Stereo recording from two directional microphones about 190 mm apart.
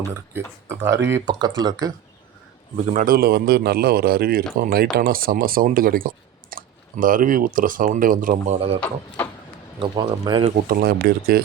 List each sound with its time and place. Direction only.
0.1 s speech: 15° right (ahead or behind)
2.7 s a man's voice: 40° right (ahead or behind)
8.8 s speech: 10° left (ahead or behind)
9.8 s speech: 25° right (ahead or behind)
10.7 s speech: 50° right (ahead or behind)